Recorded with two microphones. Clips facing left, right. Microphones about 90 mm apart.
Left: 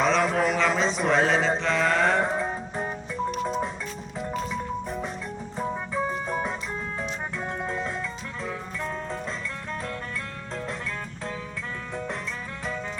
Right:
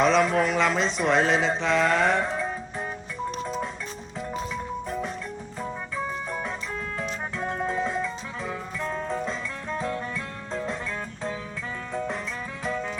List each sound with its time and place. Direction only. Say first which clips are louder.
0.0 s mantra: right 2 dB; centre (ahead or behind)
4.5 s music: even; centre (ahead or behind)
6.2 s music: left 3 dB; 10° left (ahead or behind)
7.0 s music: right 1 dB; centre (ahead or behind)
12.6 s music: right 3 dB; centre (ahead or behind)